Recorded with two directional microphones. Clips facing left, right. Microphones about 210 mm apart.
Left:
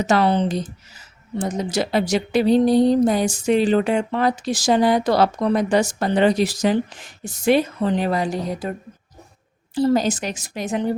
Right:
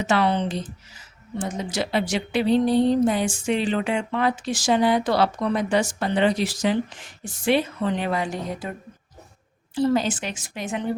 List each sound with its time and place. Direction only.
0.0 s speech: 40° left (ahead or behind)
9.7 s speech: 40° left (ahead or behind)